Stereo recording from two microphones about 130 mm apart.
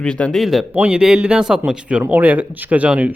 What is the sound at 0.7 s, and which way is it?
A man's voice, 10° right (ahead or behind).